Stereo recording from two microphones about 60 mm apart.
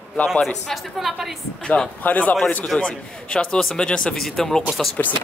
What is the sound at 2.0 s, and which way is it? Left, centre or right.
Speech, left.